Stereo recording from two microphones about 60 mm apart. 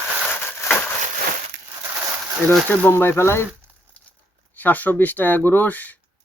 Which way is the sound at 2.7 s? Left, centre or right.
Left.